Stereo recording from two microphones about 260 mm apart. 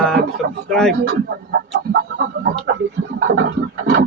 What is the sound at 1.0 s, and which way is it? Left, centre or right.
Speech, right.